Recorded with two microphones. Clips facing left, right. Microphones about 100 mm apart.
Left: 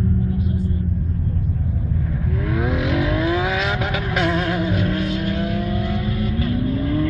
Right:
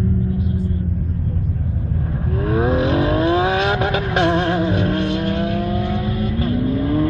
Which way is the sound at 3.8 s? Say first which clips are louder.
Right 4 dB; 30° right (ahead or behind).